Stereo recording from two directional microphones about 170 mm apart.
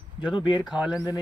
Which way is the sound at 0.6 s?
5° right (ahead or behind).